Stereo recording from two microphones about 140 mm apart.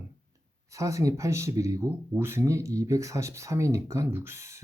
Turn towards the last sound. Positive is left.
turn(degrees=-20)  # may be behind; listen again after turning